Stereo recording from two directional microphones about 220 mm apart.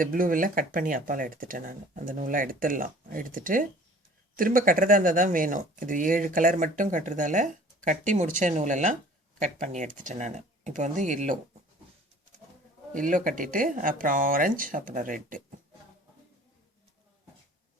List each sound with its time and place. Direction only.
0.0 s speech: 40° right (ahead or behind)
12.9 s speech: 35° right (ahead or behind)